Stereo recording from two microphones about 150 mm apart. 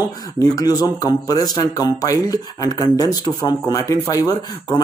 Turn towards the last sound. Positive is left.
turn(degrees=25)  # may be behind; listen again after turning